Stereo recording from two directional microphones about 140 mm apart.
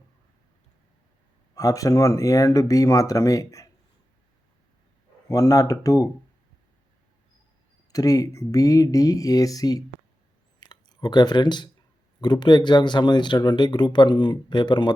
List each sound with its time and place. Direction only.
1.5 s speech: 25° left (ahead or behind)
5.3 s speech: 25° left (ahead or behind)
7.9 s speech: 25° left (ahead or behind)
10.6 s a sound: 30° left (ahead or behind)
12.2 s speech: 30° left (ahead or behind)